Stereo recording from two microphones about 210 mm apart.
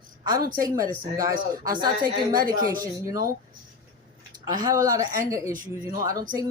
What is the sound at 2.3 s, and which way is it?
Speech, 15° right (ahead or behind).